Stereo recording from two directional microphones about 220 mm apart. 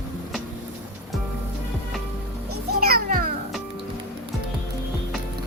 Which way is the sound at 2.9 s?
45° right (ahead or behind).